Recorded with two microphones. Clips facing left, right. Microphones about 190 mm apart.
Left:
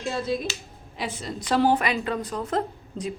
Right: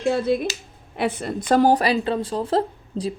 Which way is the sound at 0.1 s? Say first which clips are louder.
Right 6 dB; 60° right (ahead or behind).